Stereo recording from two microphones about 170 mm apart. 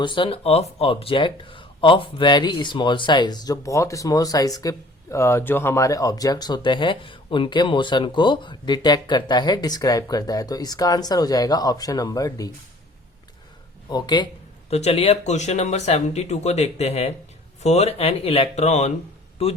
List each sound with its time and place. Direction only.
0.0 s speech: 30° left (ahead or behind)
13.9 s speech: 25° left (ahead or behind)
14.7 s speech: 40° left (ahead or behind)